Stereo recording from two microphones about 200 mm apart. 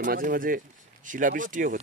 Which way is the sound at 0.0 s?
45° right (ahead or behind).